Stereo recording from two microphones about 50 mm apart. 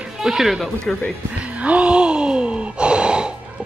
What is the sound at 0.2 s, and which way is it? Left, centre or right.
Speech, centre.